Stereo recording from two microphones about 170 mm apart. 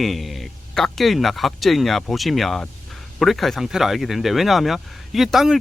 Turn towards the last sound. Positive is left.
turn(degrees=0)  # may be behind; listen again after turning